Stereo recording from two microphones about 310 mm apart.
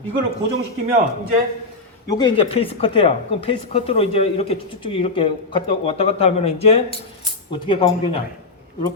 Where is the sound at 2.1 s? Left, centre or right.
Centre.